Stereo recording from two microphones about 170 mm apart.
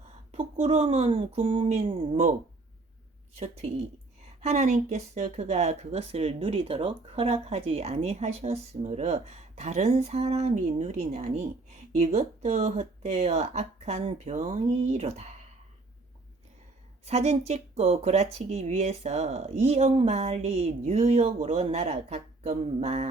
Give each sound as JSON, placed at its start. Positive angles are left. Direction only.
{"t": 0.3, "sound": "speech", "side_deg": -40}
{"t": 3.3, "sound": "speech", "side_deg": -40}
{"t": 17.1, "sound": "speech", "side_deg": -40}